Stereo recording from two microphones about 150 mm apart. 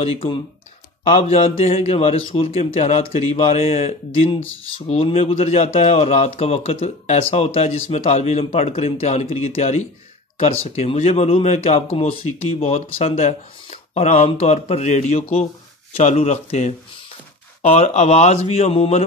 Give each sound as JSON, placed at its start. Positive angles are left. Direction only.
{"t": 0.0, "sound": "speech", "side_deg": 40}